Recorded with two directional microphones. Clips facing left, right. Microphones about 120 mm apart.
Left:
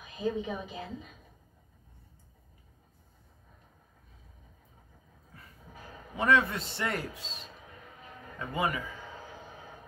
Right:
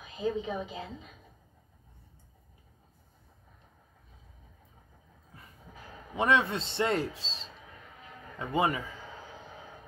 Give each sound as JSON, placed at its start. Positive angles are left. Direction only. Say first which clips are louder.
{"t": 0.0, "sound": "a woman's voice", "louder": "even", "side_deg": -25}
{"t": 6.1, "sound": "a man's voice", "louder": "even", "side_deg": -25}